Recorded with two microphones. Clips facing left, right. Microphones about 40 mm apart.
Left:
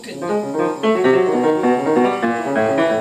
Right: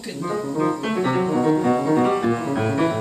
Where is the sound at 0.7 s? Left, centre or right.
Left.